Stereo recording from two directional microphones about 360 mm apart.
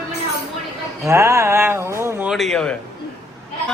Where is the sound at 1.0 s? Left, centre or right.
Centre.